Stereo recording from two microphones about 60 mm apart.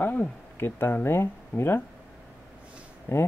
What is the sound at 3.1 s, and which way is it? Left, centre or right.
Speech, left.